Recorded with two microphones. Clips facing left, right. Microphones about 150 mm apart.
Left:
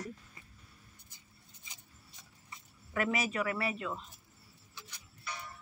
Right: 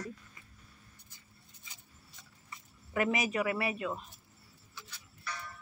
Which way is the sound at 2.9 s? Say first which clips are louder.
Right 2 dB; 20° right (ahead or behind).